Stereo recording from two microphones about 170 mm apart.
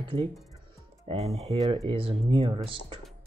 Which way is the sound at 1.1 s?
35° right (ahead or behind).